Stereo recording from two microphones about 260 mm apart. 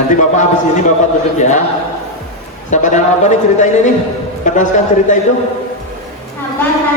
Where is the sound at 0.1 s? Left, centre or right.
Left.